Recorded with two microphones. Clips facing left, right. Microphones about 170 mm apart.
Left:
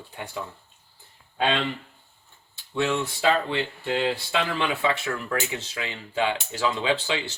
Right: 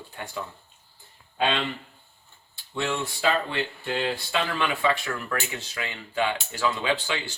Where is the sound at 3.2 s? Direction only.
25° left (ahead or behind).